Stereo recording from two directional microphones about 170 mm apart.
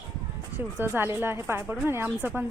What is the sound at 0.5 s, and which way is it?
A woman's voice, 15° right (ahead or behind).